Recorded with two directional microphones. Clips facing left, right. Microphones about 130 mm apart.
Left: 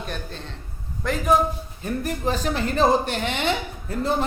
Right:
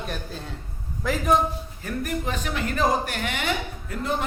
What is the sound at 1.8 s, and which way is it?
A woman's voice, 30° left (ahead or behind).